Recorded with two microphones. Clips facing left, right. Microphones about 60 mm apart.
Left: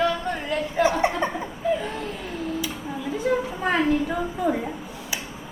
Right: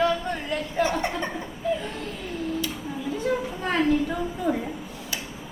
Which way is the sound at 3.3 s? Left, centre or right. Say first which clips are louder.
Left 3 dB; centre.